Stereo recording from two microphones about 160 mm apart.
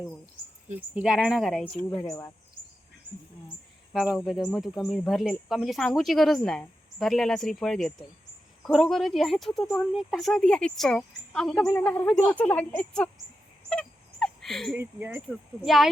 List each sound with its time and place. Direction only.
0.9 s a woman's voice: 5° right (ahead or behind)
2.0 s speech: 20° left (ahead or behind)
3.9 s a woman's voice: 5° right (ahead or behind)
13.7 s a sound: 5° left (ahead or behind)
14.8 s speech: 15° right (ahead or behind)
15.6 s a woman's voice: centre (ahead or behind)